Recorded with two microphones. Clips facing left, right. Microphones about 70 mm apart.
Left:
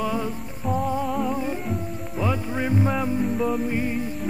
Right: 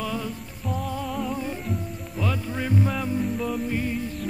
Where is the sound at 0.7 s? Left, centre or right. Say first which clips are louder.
Left 5 dB; left.